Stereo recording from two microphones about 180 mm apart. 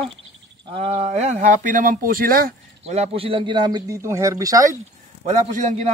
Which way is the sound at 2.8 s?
35° right (ahead or behind).